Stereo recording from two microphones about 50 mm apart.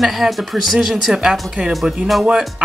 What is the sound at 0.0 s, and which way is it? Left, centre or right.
Speech, centre.